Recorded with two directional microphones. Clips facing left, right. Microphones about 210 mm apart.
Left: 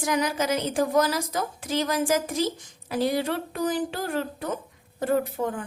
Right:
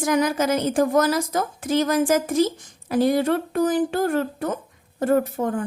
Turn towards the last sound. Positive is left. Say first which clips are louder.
# right 4 dB
turn(degrees=-45)  # may be behind; listen again after turning